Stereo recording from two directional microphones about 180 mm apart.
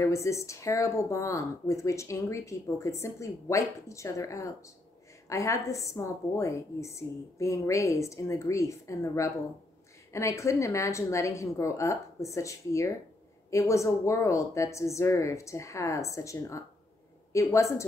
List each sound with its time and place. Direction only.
0.0 s speech: 15° left (ahead or behind)